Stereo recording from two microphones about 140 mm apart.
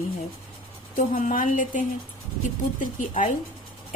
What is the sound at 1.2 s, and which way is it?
A woman's voice, 70° left (ahead or behind).